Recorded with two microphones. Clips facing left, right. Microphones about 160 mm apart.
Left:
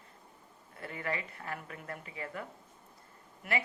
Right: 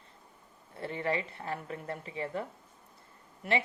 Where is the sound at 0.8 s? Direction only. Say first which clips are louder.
Right 5 dB; 30° right (ahead or behind).